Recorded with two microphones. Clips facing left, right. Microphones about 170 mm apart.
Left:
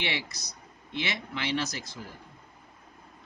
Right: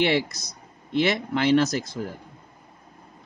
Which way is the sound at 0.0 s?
45° right (ahead or behind).